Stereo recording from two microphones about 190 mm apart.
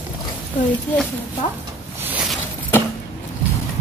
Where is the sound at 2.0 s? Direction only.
5° right (ahead or behind).